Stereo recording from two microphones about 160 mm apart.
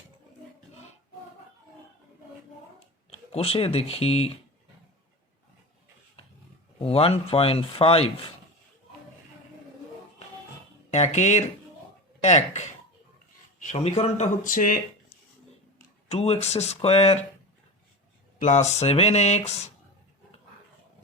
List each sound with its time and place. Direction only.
3.1 s speech: 35° left (ahead or behind)
6.7 s speech: 35° left (ahead or behind)
10.9 s speech: 45° left (ahead or behind)
14.4 s speech: 55° left (ahead or behind)
16.0 s speech: 40° left (ahead or behind)
18.3 s speech: 45° left (ahead or behind)